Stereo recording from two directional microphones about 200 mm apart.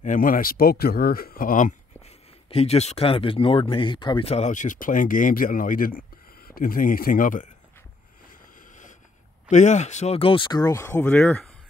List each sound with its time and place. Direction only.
0.0 s speech: 40° left (ahead or behind)
8.3 s a sound: 40° left (ahead or behind)
9.5 s speech: 35° left (ahead or behind); by 11.5 s 5° left (ahead or behind)